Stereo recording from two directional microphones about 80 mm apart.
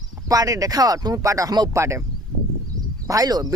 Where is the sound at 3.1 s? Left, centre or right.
Right.